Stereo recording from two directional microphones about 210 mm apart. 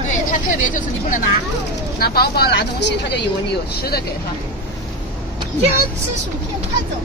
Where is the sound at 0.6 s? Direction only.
40° left (ahead or behind).